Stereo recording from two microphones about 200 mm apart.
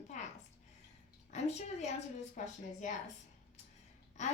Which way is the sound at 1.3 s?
35° left (ahead or behind).